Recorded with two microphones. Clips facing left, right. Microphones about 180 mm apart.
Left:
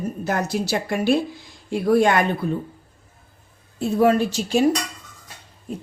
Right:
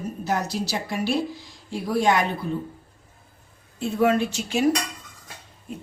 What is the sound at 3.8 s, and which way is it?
Speech, 40° left (ahead or behind).